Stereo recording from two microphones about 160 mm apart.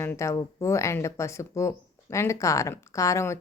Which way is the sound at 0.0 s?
15° left (ahead or behind).